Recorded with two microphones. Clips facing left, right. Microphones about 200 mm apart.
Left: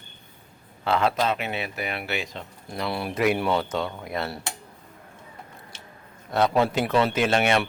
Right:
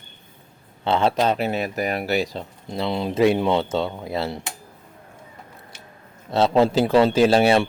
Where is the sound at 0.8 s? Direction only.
30° right (ahead or behind).